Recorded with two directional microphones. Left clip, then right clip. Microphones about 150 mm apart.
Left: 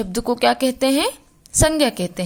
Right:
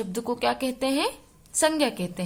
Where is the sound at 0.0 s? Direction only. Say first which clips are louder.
Left 8 dB; 30° left (ahead or behind).